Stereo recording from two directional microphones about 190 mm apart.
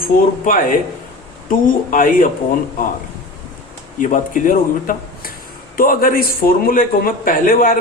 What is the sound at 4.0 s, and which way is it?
Speech, 45° left (ahead or behind).